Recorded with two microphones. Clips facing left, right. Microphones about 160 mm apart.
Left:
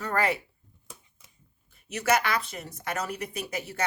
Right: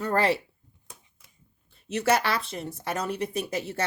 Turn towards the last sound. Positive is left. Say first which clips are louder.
# right 5 dB
turn(degrees=-25)  # may be behind; listen again after turning